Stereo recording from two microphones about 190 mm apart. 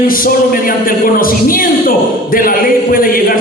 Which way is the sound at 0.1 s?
50° left (ahead or behind).